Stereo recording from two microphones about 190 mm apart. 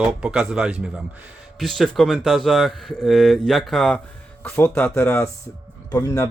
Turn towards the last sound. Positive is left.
turn(degrees=15)  # may be behind; listen again after turning